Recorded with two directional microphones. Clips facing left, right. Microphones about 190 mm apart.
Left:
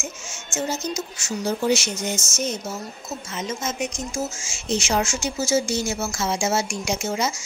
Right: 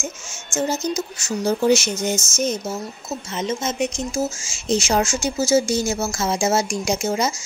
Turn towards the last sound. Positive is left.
turn(degrees=-40)  # may be behind; listen again after turning